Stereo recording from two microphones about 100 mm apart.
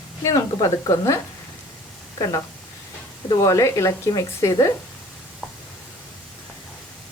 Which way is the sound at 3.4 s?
30° left (ahead or behind).